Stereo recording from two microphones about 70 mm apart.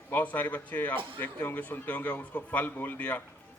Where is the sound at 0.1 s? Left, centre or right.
Left.